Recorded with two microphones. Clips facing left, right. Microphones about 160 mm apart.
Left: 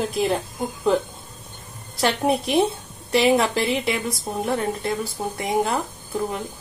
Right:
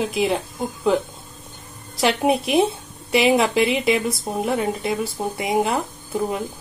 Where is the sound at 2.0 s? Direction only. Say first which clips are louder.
Right 2 dB; 5° right (ahead or behind).